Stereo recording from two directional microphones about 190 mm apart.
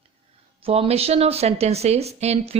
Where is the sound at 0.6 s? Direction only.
30° right (ahead or behind).